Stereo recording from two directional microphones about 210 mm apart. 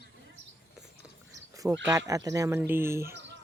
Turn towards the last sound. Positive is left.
turn(degrees=-10)  # may be behind; listen again after turning